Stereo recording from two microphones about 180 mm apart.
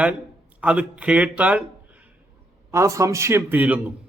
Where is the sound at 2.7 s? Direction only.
15° right (ahead or behind).